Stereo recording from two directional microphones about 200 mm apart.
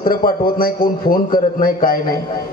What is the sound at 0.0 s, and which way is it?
Speech, 45° left (ahead or behind).